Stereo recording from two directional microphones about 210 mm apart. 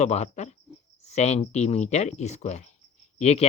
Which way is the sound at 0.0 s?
30° left (ahead or behind).